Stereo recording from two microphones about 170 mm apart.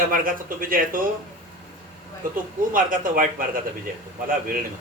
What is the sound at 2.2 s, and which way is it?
A man's voice, 55° right (ahead or behind).